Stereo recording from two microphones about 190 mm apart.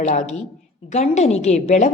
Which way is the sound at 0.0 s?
40° left (ahead or behind).